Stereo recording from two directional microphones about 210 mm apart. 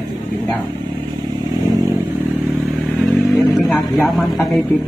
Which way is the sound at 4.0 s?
Centre (ahead or behind).